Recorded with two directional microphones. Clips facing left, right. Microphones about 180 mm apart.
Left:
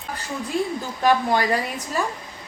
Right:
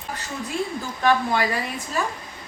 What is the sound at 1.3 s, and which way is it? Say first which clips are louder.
Dishes: left 2 dB; 40° left (ahead or behind).